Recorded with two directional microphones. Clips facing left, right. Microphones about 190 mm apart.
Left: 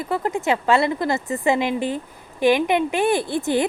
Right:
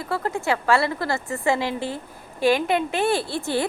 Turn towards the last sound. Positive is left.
turn(degrees=15)  # may be behind; listen again after turning